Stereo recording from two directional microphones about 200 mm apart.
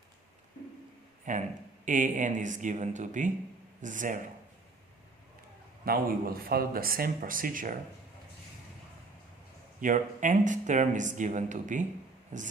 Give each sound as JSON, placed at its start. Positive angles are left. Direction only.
{"t": 1.2, "sound": "speech", "side_deg": -40}
{"t": 5.8, "sound": "speech", "side_deg": -45}
{"t": 9.8, "sound": "speech", "side_deg": -40}